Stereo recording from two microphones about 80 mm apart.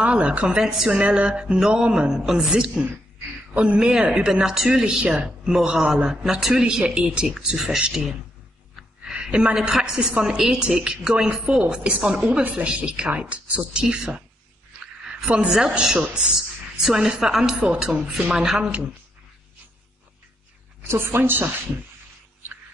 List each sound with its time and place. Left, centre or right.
0.0 s a woman's voice: centre
20.8 s speech: right